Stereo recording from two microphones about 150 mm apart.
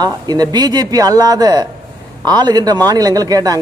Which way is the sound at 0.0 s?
25° right (ahead or behind).